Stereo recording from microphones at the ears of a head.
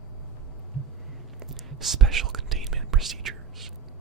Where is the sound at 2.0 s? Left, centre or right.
Right.